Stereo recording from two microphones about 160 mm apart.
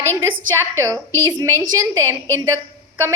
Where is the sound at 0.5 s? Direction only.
15° right (ahead or behind).